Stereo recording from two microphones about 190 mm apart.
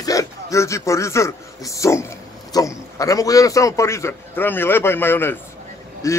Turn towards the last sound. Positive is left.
turn(degrees=15)  # may be behind; listen again after turning